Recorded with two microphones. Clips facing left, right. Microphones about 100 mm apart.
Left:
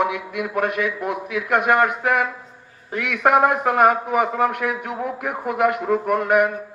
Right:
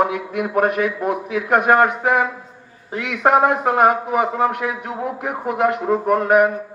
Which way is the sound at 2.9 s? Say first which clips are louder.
Right 1 dB; 25° right (ahead or behind).